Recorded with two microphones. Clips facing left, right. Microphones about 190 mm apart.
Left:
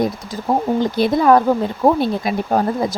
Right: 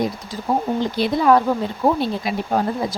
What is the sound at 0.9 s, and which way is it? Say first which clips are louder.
Speech: left 2 dB; 50° left (ahead or behind).